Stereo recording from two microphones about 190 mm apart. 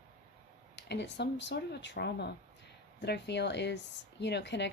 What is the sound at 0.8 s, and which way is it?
Speech, 65° left (ahead or behind).